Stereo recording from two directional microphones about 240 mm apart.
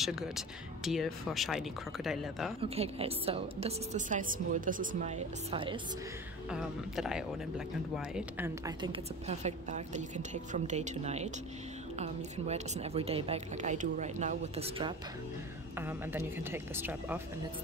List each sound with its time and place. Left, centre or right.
0.0 s speech: centre
2.6 s a woman's voice: right
6.5 s speech: centre
8.6 s a woman's voice: centre
15.8 s speech: centre